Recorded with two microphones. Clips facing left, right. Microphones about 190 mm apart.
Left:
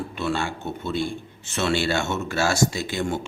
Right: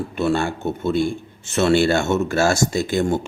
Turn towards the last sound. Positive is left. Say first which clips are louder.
# right 7 dB
turn(degrees=-45)  # may be behind; listen again after turning